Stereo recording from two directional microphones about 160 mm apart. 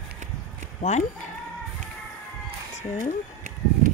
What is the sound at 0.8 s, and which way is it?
Speech, 45° left (ahead or behind).